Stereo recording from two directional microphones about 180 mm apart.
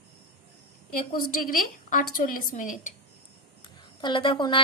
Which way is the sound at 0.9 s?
50° left (ahead or behind).